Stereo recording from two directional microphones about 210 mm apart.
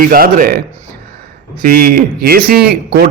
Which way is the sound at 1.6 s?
45° right (ahead or behind).